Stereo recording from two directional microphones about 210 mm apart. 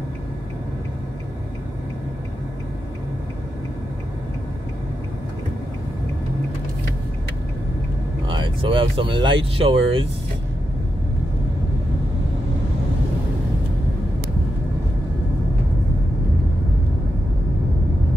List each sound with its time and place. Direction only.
8.3 s speech: 25° right (ahead or behind)